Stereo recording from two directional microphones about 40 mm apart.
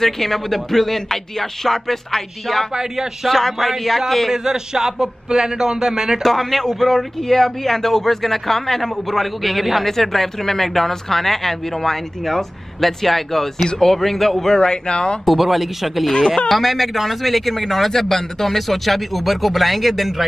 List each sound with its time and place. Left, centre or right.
0.0 s a man's voice: centre
2.7 s speech: centre
3.3 s speech: centre
4.3 s speech: centre
6.2 s a man's voice: centre
14.5 s speech: left
15.2 s speech: centre
16.1 s a man's voice: centre
16.4 s speech: centre